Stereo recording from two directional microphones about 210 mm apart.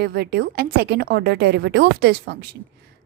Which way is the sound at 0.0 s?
50° right (ahead or behind).